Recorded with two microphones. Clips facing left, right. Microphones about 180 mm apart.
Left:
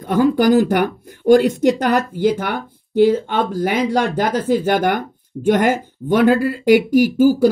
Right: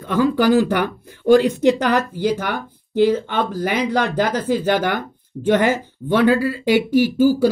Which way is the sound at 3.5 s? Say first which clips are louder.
Left 2 dB; 50° left (ahead or behind).